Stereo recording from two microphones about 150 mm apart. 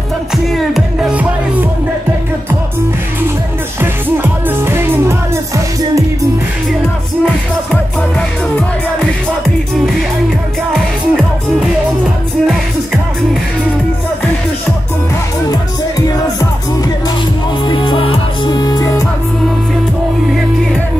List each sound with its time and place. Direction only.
0.7 s music: centre (ahead or behind)
3.8 s music: 15° right (ahead or behind)
10.7 s music: centre (ahead or behind)
17.6 s music: 35° left (ahead or behind)
20.2 s music: centre (ahead or behind)